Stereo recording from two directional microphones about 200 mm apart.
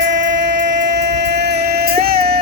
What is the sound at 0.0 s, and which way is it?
Music, 65° right (ahead or behind).